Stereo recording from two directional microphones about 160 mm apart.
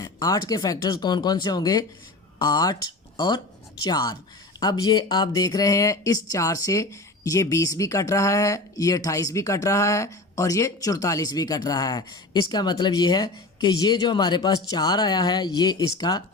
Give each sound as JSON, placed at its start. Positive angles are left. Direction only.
{"t": 0.0, "sound": "speech", "side_deg": 20}